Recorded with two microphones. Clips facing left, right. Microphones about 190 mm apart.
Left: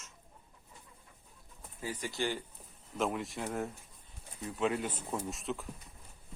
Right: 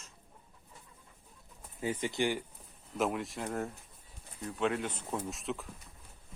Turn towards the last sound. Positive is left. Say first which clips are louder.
# even
turn(degrees=0)  # may be behind; listen again after turning